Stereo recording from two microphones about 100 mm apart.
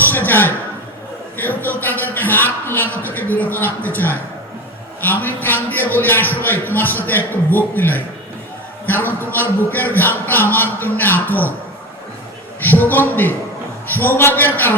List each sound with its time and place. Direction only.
0.0 s a man's voice: 20° left (ahead or behind)
12.6 s a man's voice: 20° left (ahead or behind)